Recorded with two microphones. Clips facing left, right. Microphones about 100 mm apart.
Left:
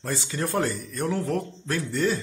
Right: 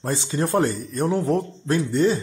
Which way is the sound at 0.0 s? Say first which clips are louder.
Right 5 dB; 25° right (ahead or behind).